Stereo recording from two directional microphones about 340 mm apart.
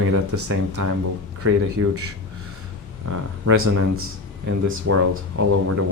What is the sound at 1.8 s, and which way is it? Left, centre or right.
Speech, right.